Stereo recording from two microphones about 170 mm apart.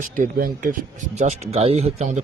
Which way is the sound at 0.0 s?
55° right (ahead or behind).